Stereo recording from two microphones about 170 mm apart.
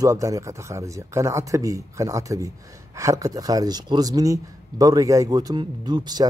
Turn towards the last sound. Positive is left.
turn(degrees=-25)  # may be behind; listen again after turning